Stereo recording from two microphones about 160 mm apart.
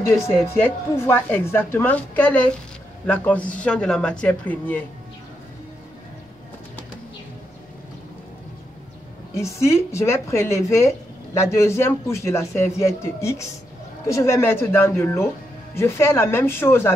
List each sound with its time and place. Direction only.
0.6 s speech: 15° left (ahead or behind)
9.3 s speech: 15° left (ahead or behind)